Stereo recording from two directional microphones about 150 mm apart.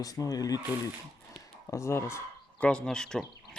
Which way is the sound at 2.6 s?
5° left (ahead or behind).